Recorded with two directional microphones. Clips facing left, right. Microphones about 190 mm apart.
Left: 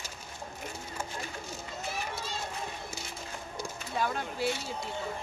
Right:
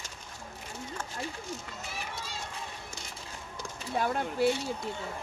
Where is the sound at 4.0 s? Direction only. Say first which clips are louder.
Right 4 dB; 55° right (ahead or behind).